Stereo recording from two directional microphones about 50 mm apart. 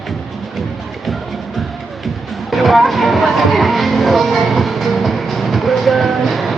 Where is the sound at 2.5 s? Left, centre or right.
Centre.